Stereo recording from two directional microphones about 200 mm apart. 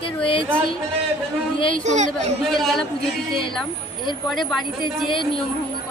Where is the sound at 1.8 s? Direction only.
35° right (ahead or behind).